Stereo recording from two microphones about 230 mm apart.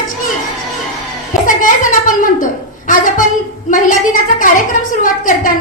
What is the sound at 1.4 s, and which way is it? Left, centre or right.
A woman's voice, left.